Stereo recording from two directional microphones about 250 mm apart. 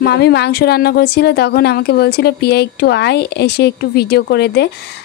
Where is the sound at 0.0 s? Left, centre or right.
Left.